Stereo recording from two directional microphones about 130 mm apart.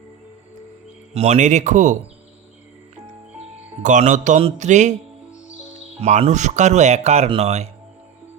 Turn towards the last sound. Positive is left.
turn(degrees=-55)  # may be behind; listen again after turning